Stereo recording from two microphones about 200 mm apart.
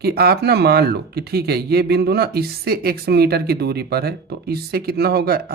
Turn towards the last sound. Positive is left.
turn(degrees=-50)  # may be behind; listen again after turning